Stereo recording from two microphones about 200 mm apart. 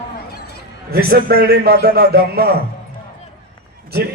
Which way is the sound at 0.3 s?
50° left (ahead or behind).